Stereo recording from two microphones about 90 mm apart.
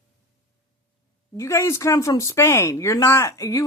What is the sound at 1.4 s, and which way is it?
A woman's voice, 35° left (ahead or behind).